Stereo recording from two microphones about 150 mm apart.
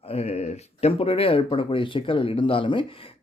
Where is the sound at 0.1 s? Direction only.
45° left (ahead or behind).